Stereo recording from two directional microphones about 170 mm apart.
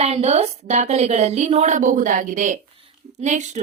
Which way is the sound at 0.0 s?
40° right (ahead or behind).